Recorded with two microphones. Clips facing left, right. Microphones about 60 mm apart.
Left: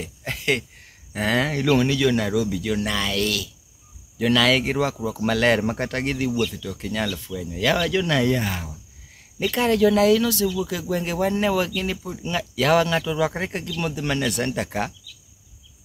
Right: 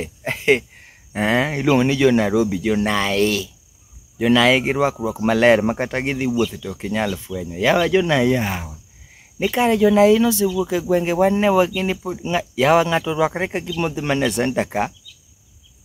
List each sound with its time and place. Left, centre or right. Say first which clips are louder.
0.0 s speech: right 6 dB; right